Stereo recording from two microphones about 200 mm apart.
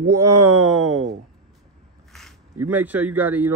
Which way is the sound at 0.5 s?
90° right.